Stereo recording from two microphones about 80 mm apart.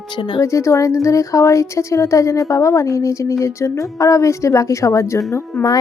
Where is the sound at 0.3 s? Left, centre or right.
Left.